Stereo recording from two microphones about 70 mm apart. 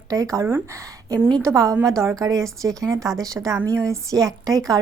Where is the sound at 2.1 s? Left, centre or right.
Right.